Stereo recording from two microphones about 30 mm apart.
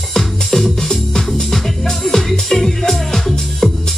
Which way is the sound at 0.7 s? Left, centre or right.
Centre.